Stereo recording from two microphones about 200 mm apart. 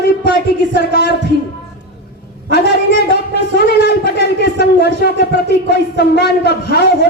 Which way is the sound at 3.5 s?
50° left (ahead or behind).